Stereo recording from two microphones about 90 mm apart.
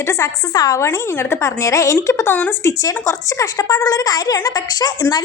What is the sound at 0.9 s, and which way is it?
A woman's voice, 25° left (ahead or behind).